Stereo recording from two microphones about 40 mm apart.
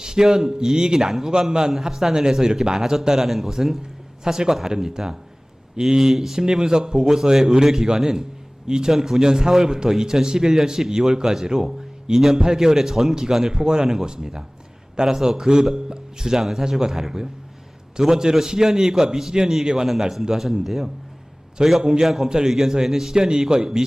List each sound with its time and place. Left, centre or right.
0.0 s a man's voice: centre
21.6 s a man's voice: centre